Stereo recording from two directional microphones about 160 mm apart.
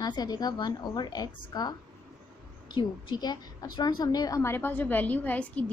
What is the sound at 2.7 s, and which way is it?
A woman's voice, 25° left (ahead or behind).